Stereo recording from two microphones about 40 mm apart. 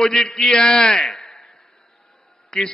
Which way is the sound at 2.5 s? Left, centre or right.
Centre.